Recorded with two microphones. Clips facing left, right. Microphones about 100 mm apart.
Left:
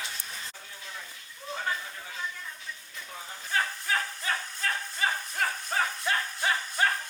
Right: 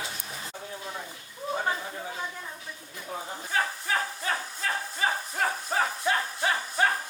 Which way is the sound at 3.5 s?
5° right (ahead or behind).